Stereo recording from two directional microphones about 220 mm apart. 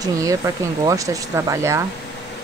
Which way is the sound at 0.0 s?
15° right (ahead or behind).